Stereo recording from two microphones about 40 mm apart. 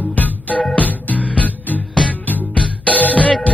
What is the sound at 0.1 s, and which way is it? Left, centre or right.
Music, left.